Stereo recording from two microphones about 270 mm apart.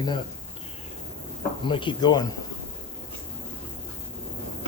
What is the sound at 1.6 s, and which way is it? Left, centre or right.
Speech, centre.